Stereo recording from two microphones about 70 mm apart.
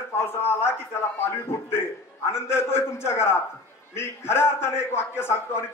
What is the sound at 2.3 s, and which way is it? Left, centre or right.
A man's voice, left.